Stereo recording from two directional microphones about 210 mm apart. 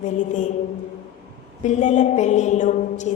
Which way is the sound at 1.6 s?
35° left (ahead or behind).